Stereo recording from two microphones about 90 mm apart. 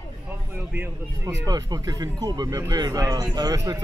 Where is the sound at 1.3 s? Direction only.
45° right (ahead or behind).